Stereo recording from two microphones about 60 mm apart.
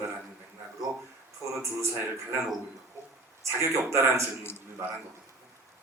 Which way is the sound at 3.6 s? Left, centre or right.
Right.